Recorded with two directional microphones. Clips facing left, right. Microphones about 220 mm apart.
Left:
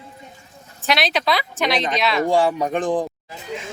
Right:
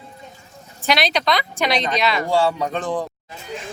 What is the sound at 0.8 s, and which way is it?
Speech, centre (ahead or behind).